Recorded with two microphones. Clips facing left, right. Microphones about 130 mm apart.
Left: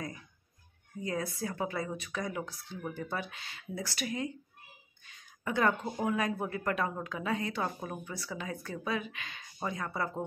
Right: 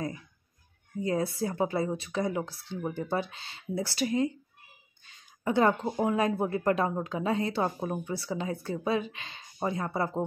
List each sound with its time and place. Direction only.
1.0 s speech: 30° right (ahead or behind)